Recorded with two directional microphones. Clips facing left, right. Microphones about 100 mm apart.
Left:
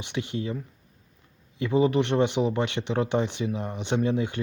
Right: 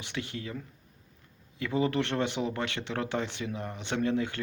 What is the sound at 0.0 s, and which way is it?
Speech, 20° left (ahead or behind).